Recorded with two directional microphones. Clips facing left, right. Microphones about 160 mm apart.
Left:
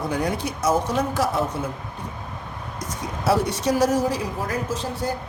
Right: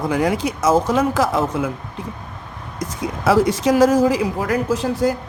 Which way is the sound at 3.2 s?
90° right.